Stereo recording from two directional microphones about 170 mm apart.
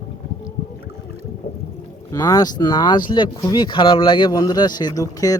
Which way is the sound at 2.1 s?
20° left (ahead or behind).